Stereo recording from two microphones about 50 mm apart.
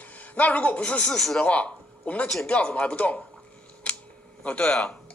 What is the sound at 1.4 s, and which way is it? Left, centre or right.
A man's voice, left.